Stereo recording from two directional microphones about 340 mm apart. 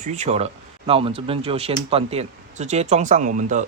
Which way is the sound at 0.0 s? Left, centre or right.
Centre.